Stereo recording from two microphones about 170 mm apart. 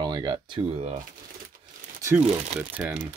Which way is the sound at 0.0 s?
25° right (ahead or behind).